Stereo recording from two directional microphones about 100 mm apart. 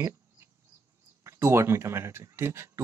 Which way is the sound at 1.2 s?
25° right (ahead or behind).